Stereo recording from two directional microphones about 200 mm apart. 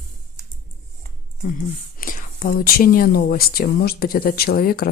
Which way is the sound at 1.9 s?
45° left (ahead or behind).